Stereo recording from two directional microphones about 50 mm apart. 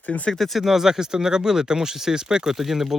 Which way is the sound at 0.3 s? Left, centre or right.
Centre.